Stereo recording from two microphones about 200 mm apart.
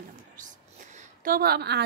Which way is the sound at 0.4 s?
35° right (ahead or behind).